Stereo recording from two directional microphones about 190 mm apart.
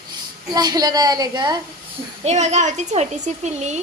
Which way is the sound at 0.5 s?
20° right (ahead or behind).